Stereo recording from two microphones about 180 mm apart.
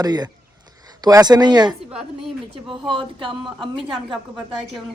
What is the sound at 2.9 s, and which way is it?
Speech, 30° right (ahead or behind).